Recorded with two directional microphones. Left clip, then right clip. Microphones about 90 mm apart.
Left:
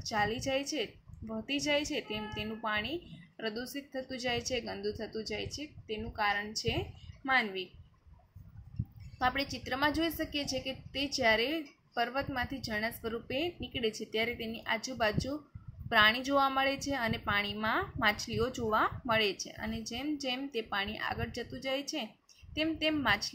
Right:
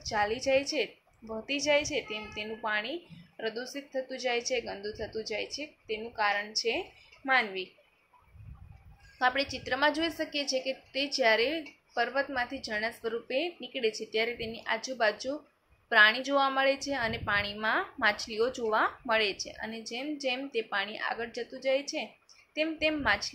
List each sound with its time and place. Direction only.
0.0 s a woman's voice: 35° left (ahead or behind)
1.4 s a woman's voice: 40° left (ahead or behind)
2.6 s a woman's voice: 35° left (ahead or behind)
9.2 s a woman's voice: 25° left (ahead or behind)